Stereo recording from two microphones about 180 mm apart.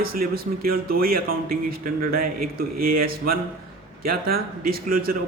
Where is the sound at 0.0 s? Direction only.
55° right (ahead or behind).